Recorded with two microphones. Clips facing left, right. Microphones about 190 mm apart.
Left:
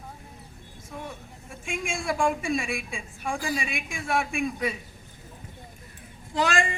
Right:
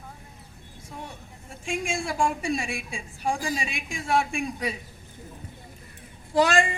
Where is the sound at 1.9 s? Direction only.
35° right (ahead or behind).